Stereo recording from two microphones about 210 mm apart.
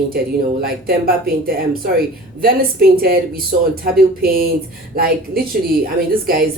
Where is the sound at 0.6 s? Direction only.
45° right (ahead or behind).